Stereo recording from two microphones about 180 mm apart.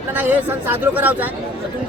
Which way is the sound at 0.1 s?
10° right (ahead or behind).